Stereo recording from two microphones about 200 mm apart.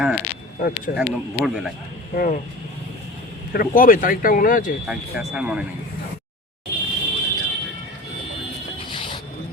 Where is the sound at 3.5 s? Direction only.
45° left (ahead or behind).